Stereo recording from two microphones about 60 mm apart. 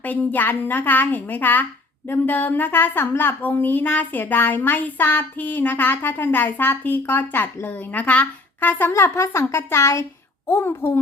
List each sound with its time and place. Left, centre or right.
0.0 s speech: left
8.9 s a woman's voice: left